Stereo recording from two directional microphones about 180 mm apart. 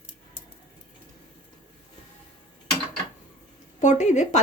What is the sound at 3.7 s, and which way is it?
Speech, 40° left (ahead or behind).